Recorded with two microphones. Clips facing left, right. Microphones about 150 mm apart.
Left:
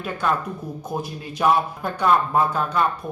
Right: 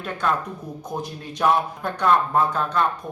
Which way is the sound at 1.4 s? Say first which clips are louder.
Left 1 dB; 5° left (ahead or behind).